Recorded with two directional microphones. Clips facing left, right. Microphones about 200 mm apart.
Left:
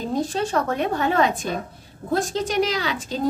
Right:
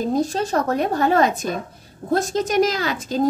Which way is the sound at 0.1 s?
40° right (ahead or behind).